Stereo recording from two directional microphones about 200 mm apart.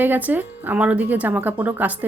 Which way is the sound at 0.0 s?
10° right (ahead or behind).